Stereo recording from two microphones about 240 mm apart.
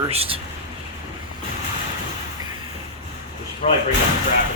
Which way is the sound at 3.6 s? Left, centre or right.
Left.